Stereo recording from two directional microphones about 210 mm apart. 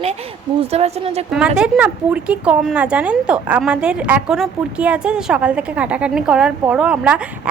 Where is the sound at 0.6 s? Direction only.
30° right (ahead or behind).